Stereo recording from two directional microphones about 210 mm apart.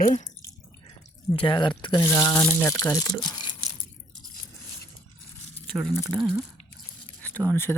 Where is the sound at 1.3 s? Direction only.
25° left (ahead or behind).